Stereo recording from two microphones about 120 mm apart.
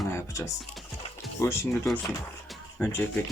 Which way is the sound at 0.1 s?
25° left (ahead or behind).